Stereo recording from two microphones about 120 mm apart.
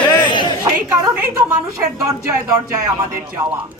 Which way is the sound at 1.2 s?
20° right (ahead or behind).